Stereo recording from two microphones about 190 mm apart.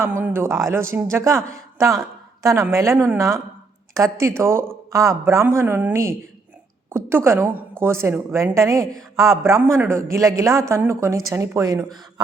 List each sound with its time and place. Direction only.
0.0 s speech: 10° right (ahead or behind)
7.3 s speech: 15° right (ahead or behind)